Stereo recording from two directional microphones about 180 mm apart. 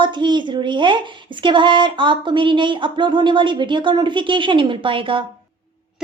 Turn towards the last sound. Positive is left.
turn(degrees=-30)  # may be behind; listen again after turning